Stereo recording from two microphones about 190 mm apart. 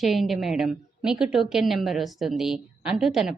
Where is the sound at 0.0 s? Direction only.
Centre (ahead or behind).